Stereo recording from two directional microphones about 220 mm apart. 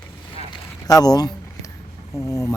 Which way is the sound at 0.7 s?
15° left (ahead or behind).